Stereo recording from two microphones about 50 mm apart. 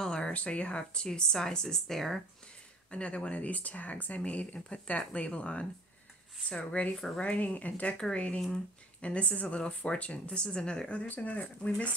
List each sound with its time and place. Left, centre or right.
0.0 s a sound: centre
0.3 s speech: left; by 2.2 s centre
2.9 s speech: left
6.8 s speech: left